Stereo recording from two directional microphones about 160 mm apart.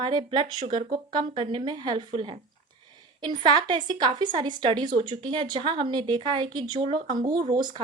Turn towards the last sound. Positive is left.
turn(degrees=-25)  # may be behind; listen again after turning